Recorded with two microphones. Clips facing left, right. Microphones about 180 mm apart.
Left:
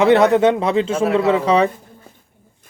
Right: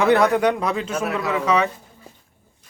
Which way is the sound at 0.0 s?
20° left (ahead or behind).